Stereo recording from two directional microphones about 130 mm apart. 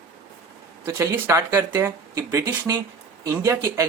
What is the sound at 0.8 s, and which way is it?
Speech, 20° right (ahead or behind).